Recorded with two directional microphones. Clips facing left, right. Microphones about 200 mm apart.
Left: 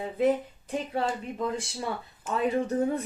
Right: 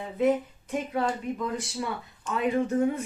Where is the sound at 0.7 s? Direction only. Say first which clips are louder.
Right 1 dB; 30° left (ahead or behind).